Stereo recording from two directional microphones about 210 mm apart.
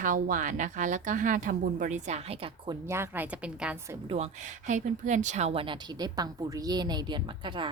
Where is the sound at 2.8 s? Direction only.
10° right (ahead or behind).